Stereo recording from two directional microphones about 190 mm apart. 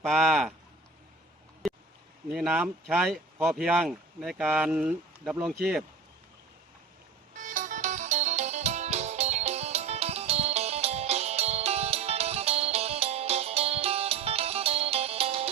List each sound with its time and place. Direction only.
0.0 s speech: centre (ahead or behind)
1.6 s a sound: centre (ahead or behind)
2.3 s speech: 5° right (ahead or behind)
7.3 s music: 40° right (ahead or behind)